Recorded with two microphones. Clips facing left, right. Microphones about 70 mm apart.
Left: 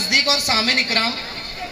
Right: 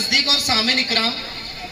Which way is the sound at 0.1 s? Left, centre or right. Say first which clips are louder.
Left 2 dB; left.